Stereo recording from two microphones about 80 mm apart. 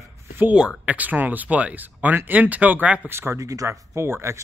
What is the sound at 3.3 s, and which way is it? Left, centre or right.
Speech, right.